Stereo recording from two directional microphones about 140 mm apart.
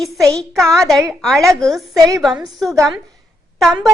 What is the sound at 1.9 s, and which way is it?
Speech, 25° right (ahead or behind).